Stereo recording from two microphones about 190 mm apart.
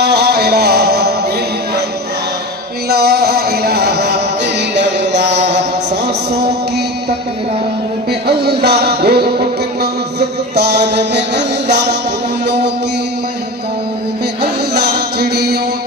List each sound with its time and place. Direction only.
0.0 s music: 60° right (ahead or behind)
2.9 s a sound: 55° right (ahead or behind)
4.7 s mantra: 65° right (ahead or behind)
8.1 s music: 60° right (ahead or behind)
14.4 s music: 60° right (ahead or behind)